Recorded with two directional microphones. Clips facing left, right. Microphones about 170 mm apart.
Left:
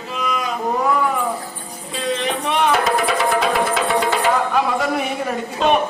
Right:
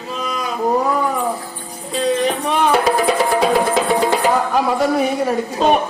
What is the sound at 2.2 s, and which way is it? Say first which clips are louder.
Music: right 2 dB; 35° right (ahead or behind).